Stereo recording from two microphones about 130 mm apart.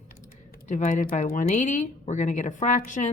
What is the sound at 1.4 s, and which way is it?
A woman's voice, 60° left (ahead or behind).